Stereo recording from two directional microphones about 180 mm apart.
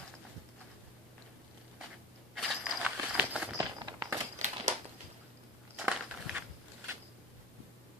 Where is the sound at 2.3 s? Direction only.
5° right (ahead or behind).